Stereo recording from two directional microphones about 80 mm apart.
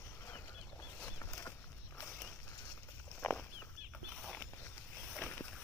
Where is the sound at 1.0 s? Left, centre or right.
Left.